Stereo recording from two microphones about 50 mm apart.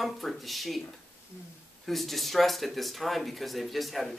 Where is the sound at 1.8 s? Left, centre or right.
Centre.